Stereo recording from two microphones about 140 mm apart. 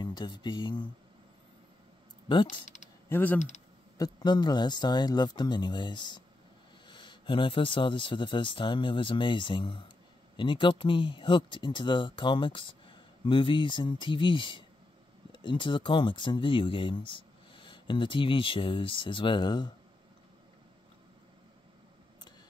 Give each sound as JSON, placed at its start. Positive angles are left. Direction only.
{"t": 0.0, "sound": "speech", "side_deg": 30}
{"t": 2.2, "sound": "speech", "side_deg": 35}
{"t": 3.1, "sound": "speech", "side_deg": 15}
{"t": 4.0, "sound": "speech", "side_deg": 30}